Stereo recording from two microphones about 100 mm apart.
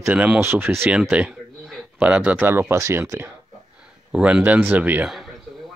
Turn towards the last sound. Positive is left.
turn(degrees=-15)  # may be behind; listen again after turning